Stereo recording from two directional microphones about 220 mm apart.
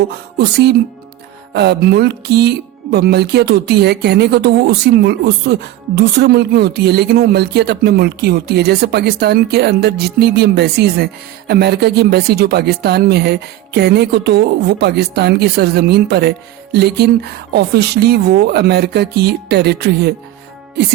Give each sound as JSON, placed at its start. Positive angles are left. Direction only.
{"t": 0.3, "sound": "speech", "side_deg": -50}